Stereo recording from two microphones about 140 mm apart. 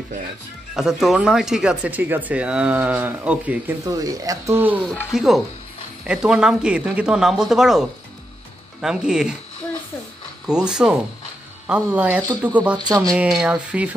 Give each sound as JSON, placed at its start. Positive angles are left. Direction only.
{"t": 0.7, "sound": "speech", "side_deg": 0}
{"t": 3.8, "sound": "speech", "side_deg": -25}
{"t": 4.6, "sound": "speech", "side_deg": -10}
{"t": 10.4, "sound": "speech", "side_deg": -5}
{"t": 12.7, "sound": "speech", "side_deg": -30}
{"t": 13.1, "sound": "speech", "side_deg": -5}